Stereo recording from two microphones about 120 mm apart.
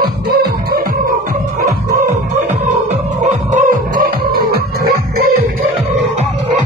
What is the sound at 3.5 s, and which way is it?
Music, 90° right.